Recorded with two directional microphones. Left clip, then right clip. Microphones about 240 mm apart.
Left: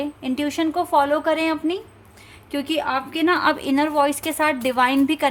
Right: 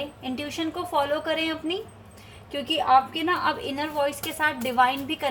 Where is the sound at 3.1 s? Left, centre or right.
Left.